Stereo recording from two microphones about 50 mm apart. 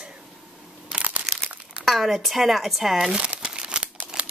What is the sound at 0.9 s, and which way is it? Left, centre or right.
Crumpling, right.